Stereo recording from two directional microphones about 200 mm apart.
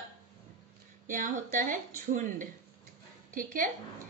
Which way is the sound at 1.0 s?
40° right (ahead or behind).